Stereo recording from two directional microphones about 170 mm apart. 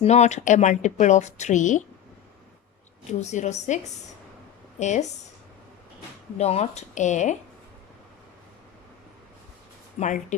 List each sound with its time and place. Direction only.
0.0 s a woman's voice: 40° left (ahead or behind)
3.1 s a woman's voice: 40° left (ahead or behind)
6.3 s a woman's voice: 40° left (ahead or behind)
10.0 s a woman's voice: 45° left (ahead or behind)